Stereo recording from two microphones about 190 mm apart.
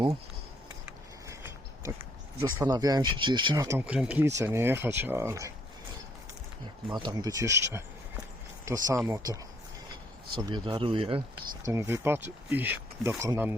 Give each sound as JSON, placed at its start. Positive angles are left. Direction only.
{"t": 2.4, "sound": "speech", "side_deg": -20}
{"t": 6.9, "sound": "speech", "side_deg": -20}
{"t": 11.6, "sound": "speech", "side_deg": -15}